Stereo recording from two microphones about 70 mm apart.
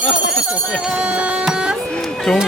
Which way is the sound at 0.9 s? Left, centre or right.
Centre.